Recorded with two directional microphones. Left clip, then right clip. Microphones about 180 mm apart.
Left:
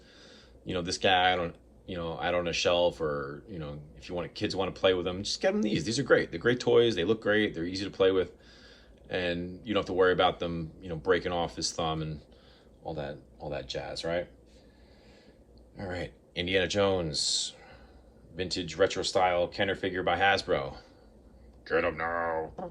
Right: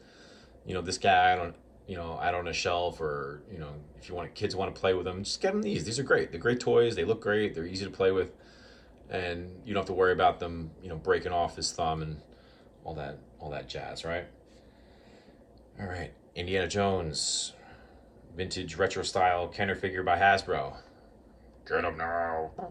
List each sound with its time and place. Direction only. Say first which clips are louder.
0.7 s speech: right 1 dB; 30° right (ahead or behind)
15.8 s speech: left 2 dB; 35° right (ahead or behind)